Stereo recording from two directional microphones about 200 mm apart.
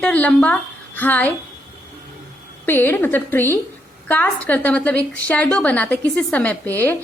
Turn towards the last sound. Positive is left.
turn(degrees=5)  # may be behind; listen again after turning